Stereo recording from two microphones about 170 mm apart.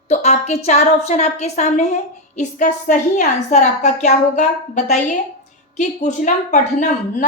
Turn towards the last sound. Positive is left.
turn(degrees=45)  # may be behind; listen again after turning